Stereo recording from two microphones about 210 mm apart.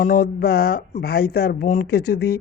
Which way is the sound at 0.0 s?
45° left (ahead or behind).